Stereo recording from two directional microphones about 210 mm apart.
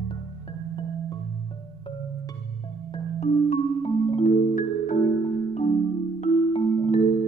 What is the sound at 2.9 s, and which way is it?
Music, 30° left (ahead or behind).